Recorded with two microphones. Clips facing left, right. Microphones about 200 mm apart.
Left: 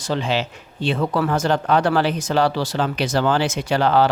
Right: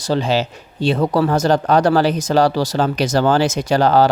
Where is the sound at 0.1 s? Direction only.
40° right (ahead or behind).